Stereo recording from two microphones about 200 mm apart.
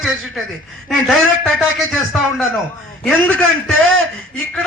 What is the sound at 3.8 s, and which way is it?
Speech, 85° right.